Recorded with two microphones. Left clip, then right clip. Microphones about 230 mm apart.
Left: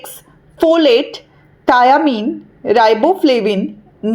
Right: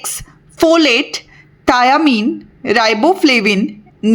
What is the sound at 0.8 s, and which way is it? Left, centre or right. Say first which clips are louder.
A woman's voice: left 2 dB; right.